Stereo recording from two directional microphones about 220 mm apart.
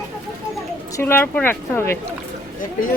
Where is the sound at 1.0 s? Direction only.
10° left (ahead or behind).